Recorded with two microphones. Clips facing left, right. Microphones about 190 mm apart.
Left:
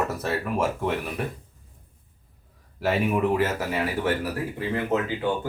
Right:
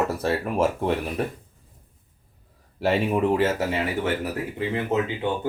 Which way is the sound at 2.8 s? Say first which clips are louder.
Right 1 dB; 30° right (ahead or behind).